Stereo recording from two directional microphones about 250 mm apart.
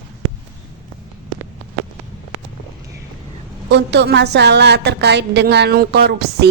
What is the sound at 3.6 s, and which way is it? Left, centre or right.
A woman's voice, right.